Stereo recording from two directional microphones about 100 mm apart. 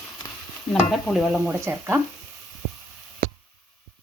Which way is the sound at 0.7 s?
5° left (ahead or behind).